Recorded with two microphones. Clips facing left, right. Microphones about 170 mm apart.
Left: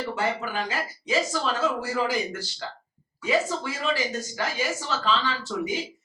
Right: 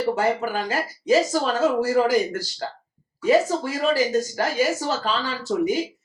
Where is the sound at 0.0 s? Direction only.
40° right (ahead or behind).